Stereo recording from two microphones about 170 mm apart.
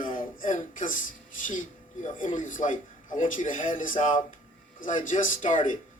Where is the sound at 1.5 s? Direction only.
50° left (ahead or behind).